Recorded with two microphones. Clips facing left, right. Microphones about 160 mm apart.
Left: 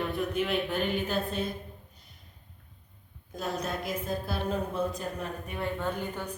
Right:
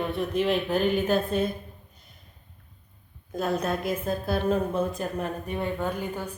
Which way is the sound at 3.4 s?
55° right (ahead or behind).